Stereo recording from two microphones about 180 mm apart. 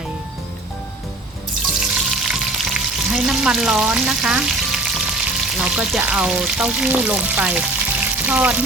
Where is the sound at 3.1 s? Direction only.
5° right (ahead or behind).